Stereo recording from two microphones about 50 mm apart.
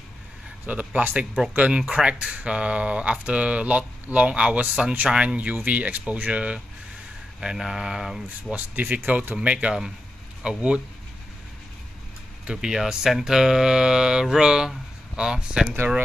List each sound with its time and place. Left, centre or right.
0.7 s speech: right
7.3 s speech: centre
8.5 s speech: right
9.4 s speech: right
12.6 s speech: centre